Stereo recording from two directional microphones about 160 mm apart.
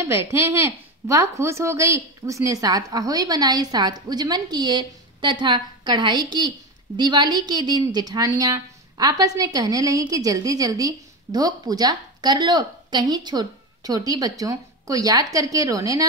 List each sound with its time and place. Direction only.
0.0 s a woman's voice: 15° right (ahead or behind)